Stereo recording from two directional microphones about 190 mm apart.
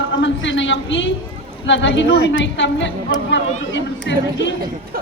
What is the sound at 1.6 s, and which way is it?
A woman's voice, 75° left (ahead or behind).